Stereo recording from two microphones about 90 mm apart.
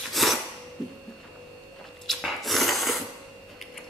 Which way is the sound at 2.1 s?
Centre (ahead or behind).